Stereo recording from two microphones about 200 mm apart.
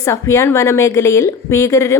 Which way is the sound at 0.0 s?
15° left (ahead or behind).